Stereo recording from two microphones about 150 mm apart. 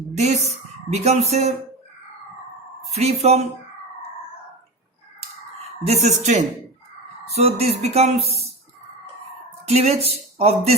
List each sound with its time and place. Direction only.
0.1 s a woman's voice: 50° right (ahead or behind)
2.9 s speech: 45° right (ahead or behind)
5.8 s speech: 45° right (ahead or behind)
9.6 s speech: 45° right (ahead or behind)